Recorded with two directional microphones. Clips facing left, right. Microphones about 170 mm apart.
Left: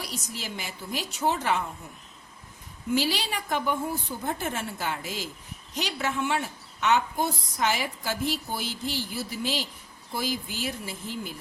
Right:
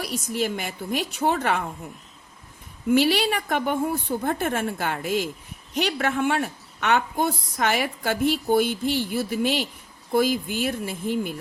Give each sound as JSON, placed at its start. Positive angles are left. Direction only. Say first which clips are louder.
{"t": 0.0, "sound": "a woman's voice", "louder": "right 10 dB", "side_deg": -55}
{"t": 2.9, "sound": "a woman's voice", "louder": "right 7 dB", "side_deg": -60}